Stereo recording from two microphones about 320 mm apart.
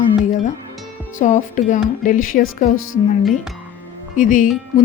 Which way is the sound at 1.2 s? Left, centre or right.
Left.